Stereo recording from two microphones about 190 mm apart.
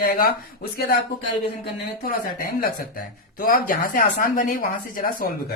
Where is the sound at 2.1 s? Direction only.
50° left (ahead or behind).